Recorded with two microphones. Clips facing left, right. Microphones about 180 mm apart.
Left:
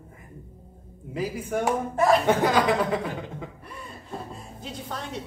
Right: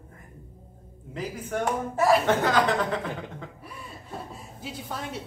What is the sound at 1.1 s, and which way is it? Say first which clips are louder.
Speech: left 3 dB; 10° left (ahead or behind).